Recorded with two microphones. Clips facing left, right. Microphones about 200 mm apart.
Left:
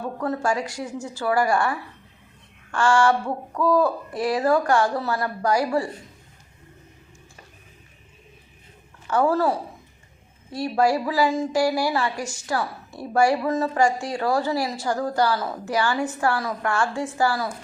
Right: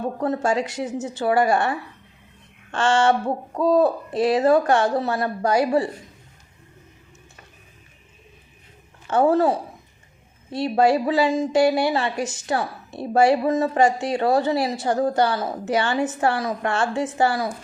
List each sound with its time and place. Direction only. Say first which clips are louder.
0.2 s speech: right 2 dB; 25° right (ahead or behind)
9.0 s speech: right 3 dB; 25° right (ahead or behind)